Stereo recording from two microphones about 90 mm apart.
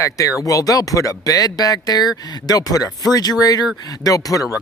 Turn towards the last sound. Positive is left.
turn(degrees=40)  # may be behind; listen again after turning